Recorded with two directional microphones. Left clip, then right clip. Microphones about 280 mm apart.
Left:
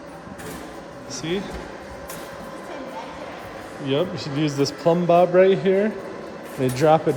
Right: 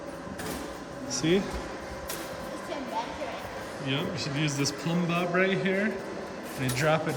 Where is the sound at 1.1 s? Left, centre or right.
Centre.